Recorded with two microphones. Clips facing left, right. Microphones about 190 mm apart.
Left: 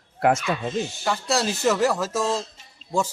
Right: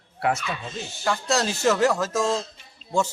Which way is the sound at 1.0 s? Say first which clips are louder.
Right 2 dB; 10° left (ahead or behind).